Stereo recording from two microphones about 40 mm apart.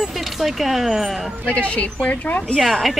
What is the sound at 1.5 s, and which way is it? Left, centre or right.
A woman's voice, left.